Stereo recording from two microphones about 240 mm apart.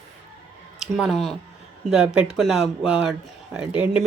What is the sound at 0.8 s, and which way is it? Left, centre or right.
Speech, centre.